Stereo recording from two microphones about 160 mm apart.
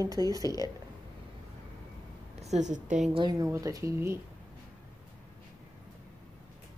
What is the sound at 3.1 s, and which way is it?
Speech, 25° right (ahead or behind).